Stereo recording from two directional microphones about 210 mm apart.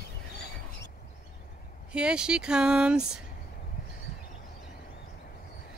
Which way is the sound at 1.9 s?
5° right (ahead or behind).